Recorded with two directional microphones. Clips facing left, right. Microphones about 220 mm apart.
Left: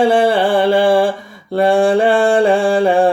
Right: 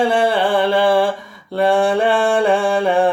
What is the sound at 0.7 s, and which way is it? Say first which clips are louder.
Mantra: left 3 dB; 30° left (ahead or behind).